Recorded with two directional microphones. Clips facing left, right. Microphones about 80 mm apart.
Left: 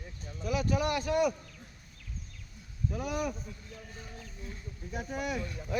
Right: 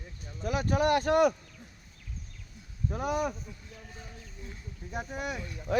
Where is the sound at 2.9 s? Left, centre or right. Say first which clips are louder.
Right 4 dB; right.